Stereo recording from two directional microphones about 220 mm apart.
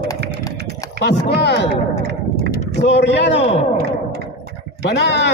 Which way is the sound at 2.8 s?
50° left (ahead or behind).